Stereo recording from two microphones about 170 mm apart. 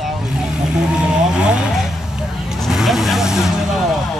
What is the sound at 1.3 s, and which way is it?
Vehicle, 5° right (ahead or behind).